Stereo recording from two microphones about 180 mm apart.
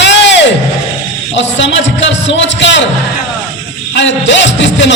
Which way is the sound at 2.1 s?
90° left.